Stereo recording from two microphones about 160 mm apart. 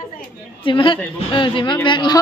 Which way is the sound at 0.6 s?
30° left (ahead or behind).